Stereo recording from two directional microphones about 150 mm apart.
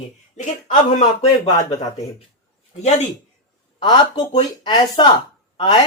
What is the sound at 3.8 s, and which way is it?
Speech, 30° left (ahead or behind).